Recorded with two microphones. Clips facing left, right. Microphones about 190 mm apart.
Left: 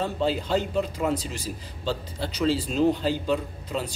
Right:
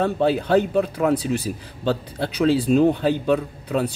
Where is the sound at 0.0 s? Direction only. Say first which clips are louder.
Right 6 dB; 60° right (ahead or behind).